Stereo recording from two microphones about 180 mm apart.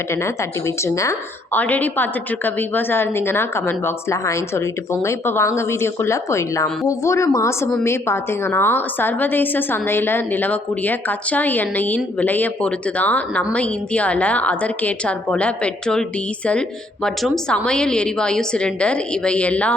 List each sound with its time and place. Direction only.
0.8 s a woman's voice: 15° left (ahead or behind)